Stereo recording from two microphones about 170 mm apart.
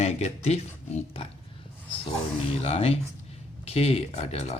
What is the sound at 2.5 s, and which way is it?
Speech, 35° left (ahead or behind).